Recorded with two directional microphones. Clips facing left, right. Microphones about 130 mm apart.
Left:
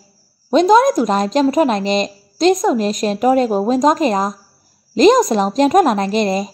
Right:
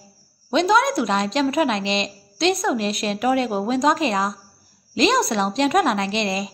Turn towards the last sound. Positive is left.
turn(degrees=45)  # may be behind; listen again after turning